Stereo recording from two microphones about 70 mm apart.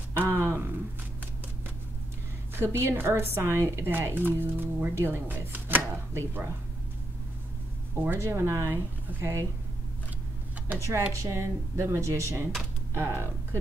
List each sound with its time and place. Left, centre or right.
0.1 s a sound: right
2.6 s speech: right
6.1 s speech: right
7.9 s speech: right
8.2 s speech: right
10.8 s speech: right